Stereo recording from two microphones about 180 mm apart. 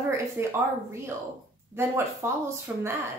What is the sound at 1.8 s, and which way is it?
Speech, 15° right (ahead or behind).